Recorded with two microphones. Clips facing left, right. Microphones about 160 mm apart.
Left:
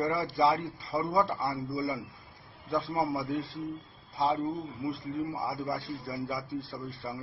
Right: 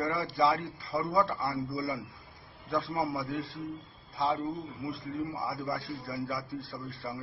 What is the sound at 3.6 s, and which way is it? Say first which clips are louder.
Speech: left 2 dB; 35° left (ahead or behind).